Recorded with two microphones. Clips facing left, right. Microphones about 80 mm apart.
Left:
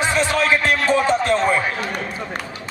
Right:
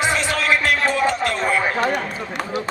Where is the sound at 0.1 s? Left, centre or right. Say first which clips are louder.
Left 2 dB; left.